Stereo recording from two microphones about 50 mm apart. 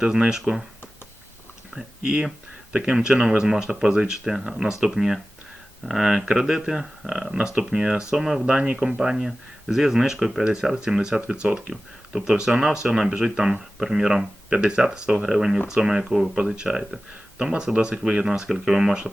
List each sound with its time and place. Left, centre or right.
0.2 s speech: centre
2.0 s speech: centre
9.0 s speech: centre
11.7 s speech: centre
18.4 s speech: centre